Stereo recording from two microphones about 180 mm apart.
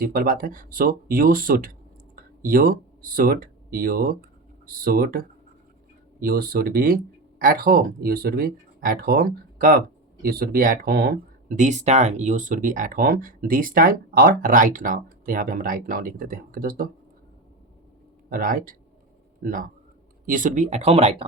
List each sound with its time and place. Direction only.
0.0 s speech: 55° right (ahead or behind)
18.3 s speech: 50° right (ahead or behind); by 21.2 s 35° right (ahead or behind)